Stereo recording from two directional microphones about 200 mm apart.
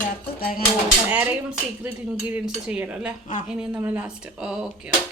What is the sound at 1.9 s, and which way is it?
Cutlery, 5° right (ahead or behind).